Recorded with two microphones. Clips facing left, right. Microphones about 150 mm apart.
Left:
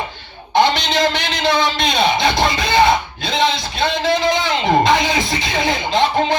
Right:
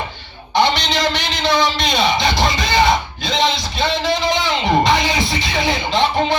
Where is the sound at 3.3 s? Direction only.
55° left (ahead or behind).